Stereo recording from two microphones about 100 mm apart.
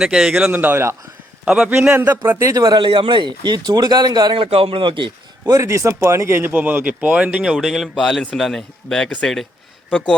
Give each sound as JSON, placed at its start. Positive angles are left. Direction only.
{"t": 0.0, "sound": "speech", "side_deg": -5}
{"t": 1.5, "sound": "speech", "side_deg": -10}
{"t": 1.9, "sound": "speech", "side_deg": -20}
{"t": 2.5, "sound": "speech", "side_deg": -40}
{"t": 2.8, "sound": "speech", "side_deg": -55}
{"t": 4.4, "sound": "a man's voice", "side_deg": -70}
{"t": 5.5, "sound": "speech", "side_deg": -35}